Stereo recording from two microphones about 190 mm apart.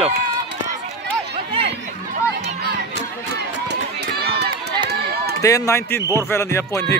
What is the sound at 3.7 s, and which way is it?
Run, 60° right (ahead or behind).